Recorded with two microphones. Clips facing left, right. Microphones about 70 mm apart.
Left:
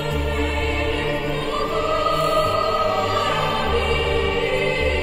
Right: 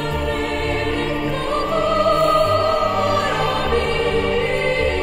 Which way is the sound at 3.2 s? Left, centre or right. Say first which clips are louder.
Right 2 dB; right.